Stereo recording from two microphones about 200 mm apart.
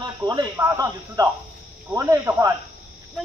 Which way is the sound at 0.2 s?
20° right (ahead or behind).